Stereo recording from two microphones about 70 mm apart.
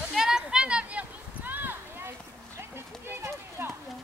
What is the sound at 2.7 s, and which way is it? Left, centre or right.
Speech, right.